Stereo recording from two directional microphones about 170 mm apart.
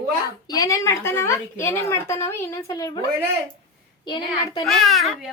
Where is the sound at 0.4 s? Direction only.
20° left (ahead or behind).